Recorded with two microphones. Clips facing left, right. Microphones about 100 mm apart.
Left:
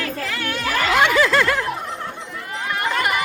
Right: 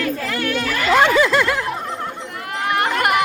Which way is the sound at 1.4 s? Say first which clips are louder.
Even; 10° right (ahead or behind).